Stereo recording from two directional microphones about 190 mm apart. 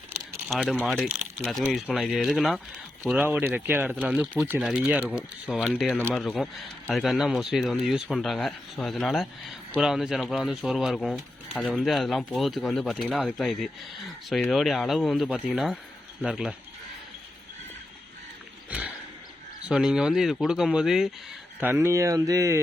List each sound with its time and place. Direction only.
0.4 s speech: centre (ahead or behind)
19.6 s speech: 5° right (ahead or behind)